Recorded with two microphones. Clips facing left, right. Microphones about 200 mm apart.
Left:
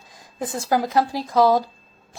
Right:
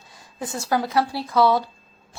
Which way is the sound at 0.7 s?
40° left (ahead or behind).